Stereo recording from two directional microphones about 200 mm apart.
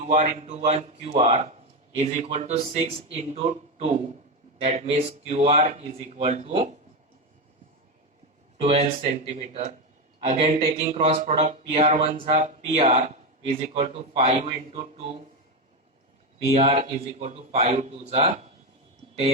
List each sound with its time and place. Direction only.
0.0 s speech: 35° right (ahead or behind)
8.6 s speech: 30° right (ahead or behind)
16.6 s speech: 35° right (ahead or behind)